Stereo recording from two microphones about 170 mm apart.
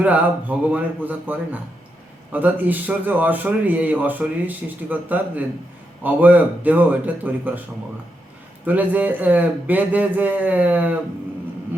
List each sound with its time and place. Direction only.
0.0 s speech: 10° right (ahead or behind)
8.6 s speech: 10° right (ahead or behind)